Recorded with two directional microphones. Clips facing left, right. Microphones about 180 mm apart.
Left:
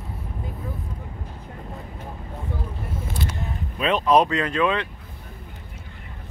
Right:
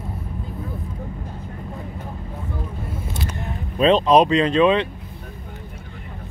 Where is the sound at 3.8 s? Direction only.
25° right (ahead or behind).